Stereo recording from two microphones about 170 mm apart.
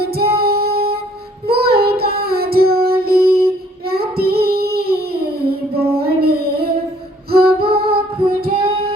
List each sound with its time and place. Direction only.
0.0 s music: 65° right (ahead or behind)
1.5 s child singing: 65° right (ahead or behind)
7.3 s music: 65° right (ahead or behind)
7.9 s music: 35° right (ahead or behind)
8.4 s child singing: 35° right (ahead or behind)